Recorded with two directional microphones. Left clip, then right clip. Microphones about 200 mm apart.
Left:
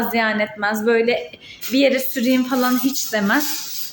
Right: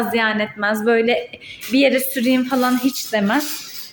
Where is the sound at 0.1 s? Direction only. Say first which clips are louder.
Even; 10° right (ahead or behind).